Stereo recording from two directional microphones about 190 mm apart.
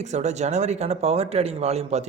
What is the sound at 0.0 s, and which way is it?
Speech, 35° right (ahead or behind).